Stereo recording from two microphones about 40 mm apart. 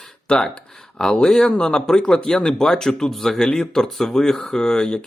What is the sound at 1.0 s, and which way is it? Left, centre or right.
Speech, left.